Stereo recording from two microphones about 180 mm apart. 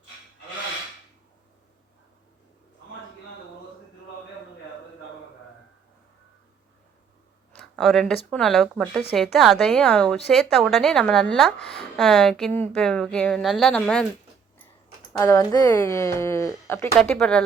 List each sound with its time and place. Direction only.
7.6 s a woman's voice: centre (ahead or behind)
15.2 s speech: 15° left (ahead or behind)
17.0 s a woman's voice: 5° left (ahead or behind)